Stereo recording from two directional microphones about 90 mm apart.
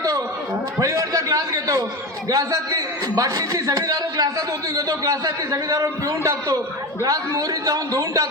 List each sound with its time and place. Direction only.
0.8 s a man's voice: 40° right (ahead or behind)